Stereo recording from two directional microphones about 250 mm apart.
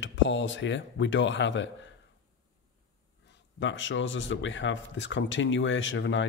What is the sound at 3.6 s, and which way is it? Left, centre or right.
A man's voice, left.